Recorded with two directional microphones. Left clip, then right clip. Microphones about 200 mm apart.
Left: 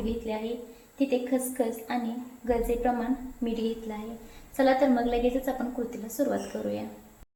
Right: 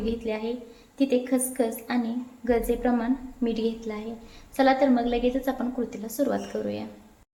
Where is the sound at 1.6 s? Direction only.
35° right (ahead or behind).